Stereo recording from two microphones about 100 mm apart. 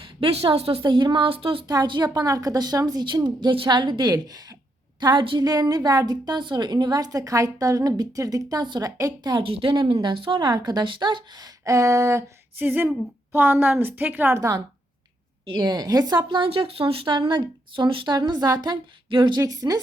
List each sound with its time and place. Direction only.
0.0 s a woman's voice: 70° right (ahead or behind)
0.8 s speech: 50° right (ahead or behind)
1.6 s a woman's voice: 40° right (ahead or behind)
5.4 s a woman's voice: 40° right (ahead or behind)
9.4 s a woman's voice: 65° right (ahead or behind)
11.6 s a woman's voice: 35° right (ahead or behind)
12.5 s a woman's voice: 20° right (ahead or behind)
15.4 s a woman's voice: 45° right (ahead or behind); by 17.2 s 65° right (ahead or behind)
17.2 s a woman's voice: 50° right (ahead or behind)
18.1 s a woman's voice: 40° right (ahead or behind)
19.1 s speech: 55° right (ahead or behind)
19.4 s a woman's voice: 40° right (ahead or behind)